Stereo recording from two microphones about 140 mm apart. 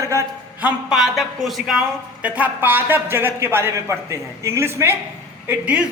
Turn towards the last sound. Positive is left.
turn(degrees=-10)  # may be behind; listen again after turning